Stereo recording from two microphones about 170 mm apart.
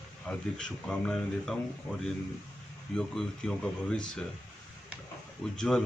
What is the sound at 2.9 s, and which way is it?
Speech, 5° left (ahead or behind).